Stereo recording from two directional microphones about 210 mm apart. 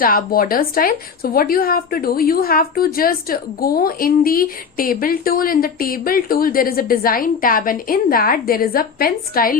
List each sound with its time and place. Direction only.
0.0 s a woman's voice: 45° left (ahead or behind)